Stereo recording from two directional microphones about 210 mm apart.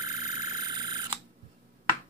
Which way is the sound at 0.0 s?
15° right (ahead or behind).